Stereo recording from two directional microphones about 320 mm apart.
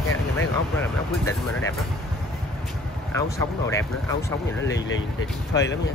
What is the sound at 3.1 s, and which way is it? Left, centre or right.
Speech, centre.